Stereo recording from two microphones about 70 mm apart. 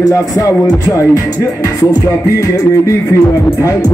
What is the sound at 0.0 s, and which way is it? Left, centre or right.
Speech, left.